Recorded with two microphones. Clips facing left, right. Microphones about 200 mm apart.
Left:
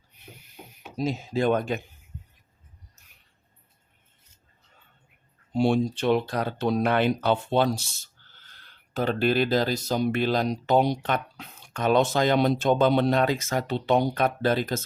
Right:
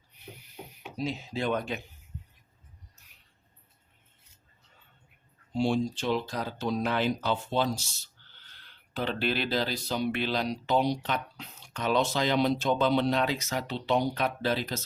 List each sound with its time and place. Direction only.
0.9 s speech: 45° left (ahead or behind)
5.5 s speech: 60° left (ahead or behind)